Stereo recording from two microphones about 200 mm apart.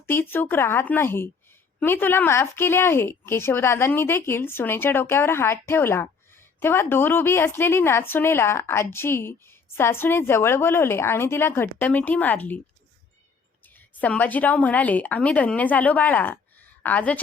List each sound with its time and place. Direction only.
0.0 s a woman's voice: 10° left (ahead or behind)
13.7 s a woman's voice: 10° left (ahead or behind)